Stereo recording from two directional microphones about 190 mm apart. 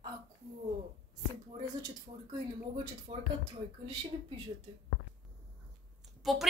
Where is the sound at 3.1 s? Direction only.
30° right (ahead or behind).